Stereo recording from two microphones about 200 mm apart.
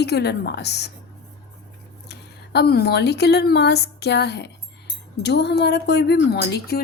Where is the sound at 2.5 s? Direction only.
55° left (ahead or behind).